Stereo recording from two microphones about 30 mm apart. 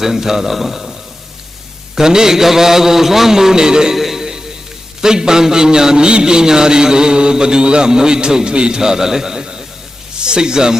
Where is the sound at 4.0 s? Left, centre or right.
Centre.